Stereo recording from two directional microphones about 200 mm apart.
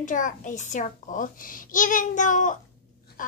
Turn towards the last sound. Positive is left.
turn(degrees=40)  # may be behind; listen again after turning